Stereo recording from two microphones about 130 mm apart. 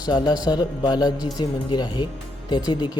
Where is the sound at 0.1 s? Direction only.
35° left (ahead or behind).